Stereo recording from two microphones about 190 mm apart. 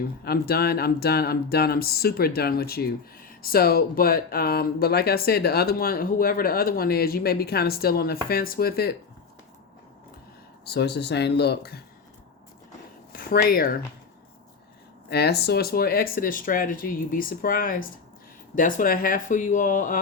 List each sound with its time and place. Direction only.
0.3 s speech: 55° left (ahead or behind)
10.7 s speech: 60° left (ahead or behind)
13.1 s speech: 50° left (ahead or behind)
15.1 s speech: 60° left (ahead or behind); by 20.0 s 45° left (ahead or behind)